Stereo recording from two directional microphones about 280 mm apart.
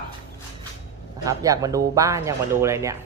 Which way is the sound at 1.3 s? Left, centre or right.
Centre.